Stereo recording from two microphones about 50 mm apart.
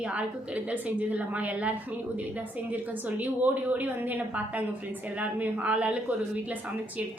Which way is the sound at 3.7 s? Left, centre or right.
Right.